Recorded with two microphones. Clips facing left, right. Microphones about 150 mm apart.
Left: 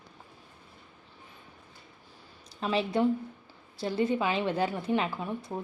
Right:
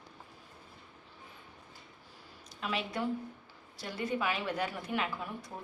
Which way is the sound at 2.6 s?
30° left (ahead or behind).